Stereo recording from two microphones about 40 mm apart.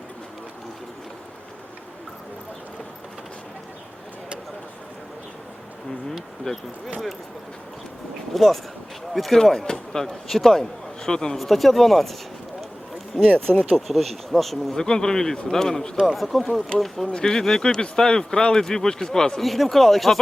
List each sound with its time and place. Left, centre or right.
6.4 s speech: centre
8.3 s speech: centre
11.0 s speech: centre
11.3 s speech: centre
13.1 s speech: centre
13.8 s speech: centre
14.8 s speech: centre
16.0 s speech: centre
17.1 s speech: centre
19.4 s speech: centre